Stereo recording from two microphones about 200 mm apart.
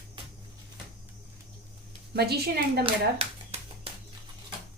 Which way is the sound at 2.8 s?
30° right (ahead or behind).